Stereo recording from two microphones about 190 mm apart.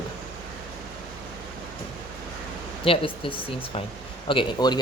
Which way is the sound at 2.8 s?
30° left (ahead or behind).